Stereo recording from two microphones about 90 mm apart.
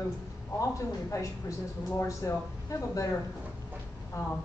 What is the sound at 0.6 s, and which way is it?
A woman's voice, 35° left (ahead or behind).